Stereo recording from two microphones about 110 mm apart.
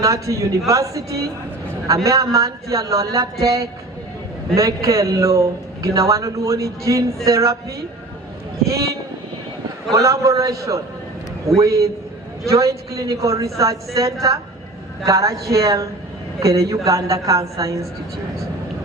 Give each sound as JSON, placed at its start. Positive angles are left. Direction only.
{"t": 0.0, "sound": "a man's voice", "side_deg": -30}
{"t": 8.6, "sound": "a man's voice", "side_deg": -30}
{"t": 9.9, "sound": "a man's voice", "side_deg": -30}